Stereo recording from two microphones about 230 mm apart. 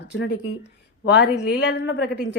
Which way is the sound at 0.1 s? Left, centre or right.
Left.